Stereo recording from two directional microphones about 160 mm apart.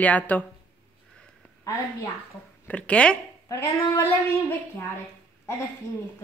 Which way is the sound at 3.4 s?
20° left (ahead or behind).